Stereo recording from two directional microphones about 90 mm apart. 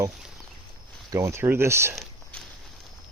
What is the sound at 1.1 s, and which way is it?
Speech, 30° right (ahead or behind).